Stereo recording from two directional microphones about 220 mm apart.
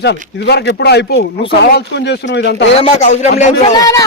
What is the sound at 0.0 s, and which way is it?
Speech, 50° left (ahead or behind).